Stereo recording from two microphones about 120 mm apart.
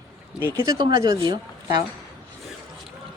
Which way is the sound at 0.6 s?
35° right (ahead or behind).